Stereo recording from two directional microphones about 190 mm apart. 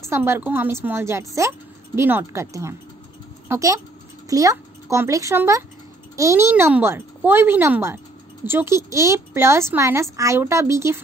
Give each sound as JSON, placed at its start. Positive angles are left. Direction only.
{"t": 0.0, "sound": "a woman's voice", "side_deg": -15}